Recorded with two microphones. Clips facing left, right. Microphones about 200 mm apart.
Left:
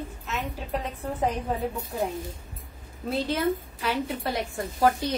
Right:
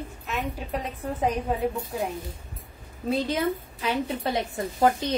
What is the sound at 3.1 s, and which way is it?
A woman's voice, 15° right (ahead or behind).